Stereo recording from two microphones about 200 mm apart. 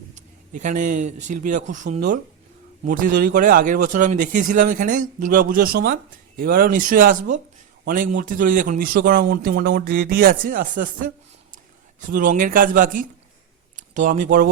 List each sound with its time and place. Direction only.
0.2 s a man's voice: 40° right (ahead or behind)